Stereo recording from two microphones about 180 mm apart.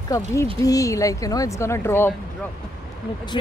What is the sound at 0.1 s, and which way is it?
Speech, 15° left (ahead or behind).